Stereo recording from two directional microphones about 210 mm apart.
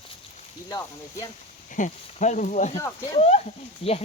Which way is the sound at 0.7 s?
15° left (ahead or behind).